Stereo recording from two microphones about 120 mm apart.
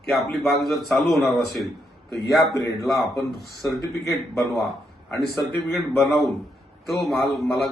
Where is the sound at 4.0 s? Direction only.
25° left (ahead or behind).